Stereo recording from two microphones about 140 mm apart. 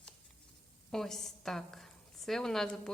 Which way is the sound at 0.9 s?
5° left (ahead or behind).